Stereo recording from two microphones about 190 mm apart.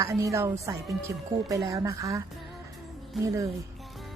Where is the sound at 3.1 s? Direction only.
Centre (ahead or behind).